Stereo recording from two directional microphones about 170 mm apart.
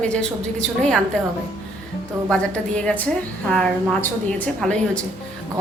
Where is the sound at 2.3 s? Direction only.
5° left (ahead or behind).